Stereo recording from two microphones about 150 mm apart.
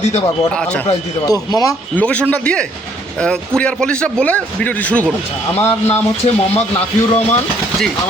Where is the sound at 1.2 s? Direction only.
25° left (ahead or behind).